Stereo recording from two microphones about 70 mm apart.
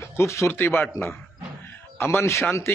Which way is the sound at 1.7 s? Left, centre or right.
Left.